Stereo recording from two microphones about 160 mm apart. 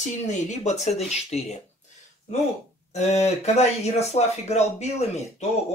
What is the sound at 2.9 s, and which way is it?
Speech, 45° left (ahead or behind).